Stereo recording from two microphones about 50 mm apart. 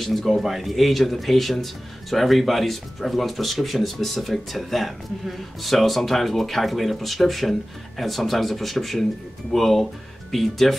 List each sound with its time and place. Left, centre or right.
0.0 s speech: centre